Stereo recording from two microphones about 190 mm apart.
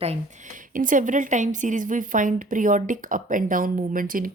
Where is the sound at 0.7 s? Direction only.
45° right (ahead or behind).